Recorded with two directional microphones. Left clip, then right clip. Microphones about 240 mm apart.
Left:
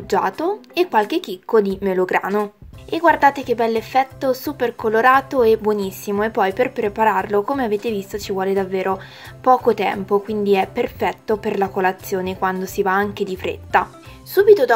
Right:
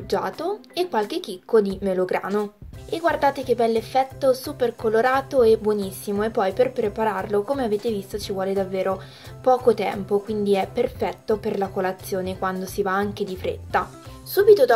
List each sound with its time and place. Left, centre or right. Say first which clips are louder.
0.1 s a woman's voice: left 6 dB; left